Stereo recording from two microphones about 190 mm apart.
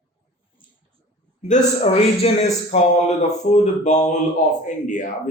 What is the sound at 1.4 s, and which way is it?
A man's voice, 40° left (ahead or behind).